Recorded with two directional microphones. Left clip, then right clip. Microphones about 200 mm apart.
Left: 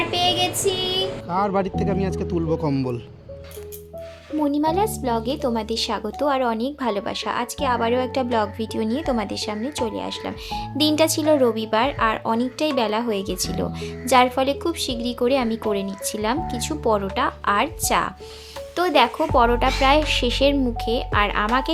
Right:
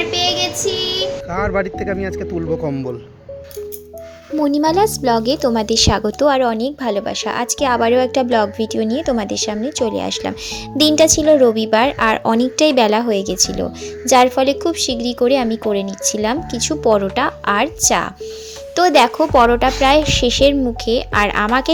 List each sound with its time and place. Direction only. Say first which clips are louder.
0.1 s child singing: right 3 dB; 10° right (ahead or behind)
1.3 s speech: even; 15° left (ahead or behind)
4.4 s a woman's voice: right 6 dB; 30° right (ahead or behind)